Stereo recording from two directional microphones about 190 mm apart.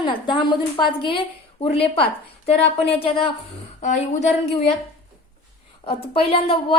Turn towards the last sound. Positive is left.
turn(degrees=30)  # may be behind; listen again after turning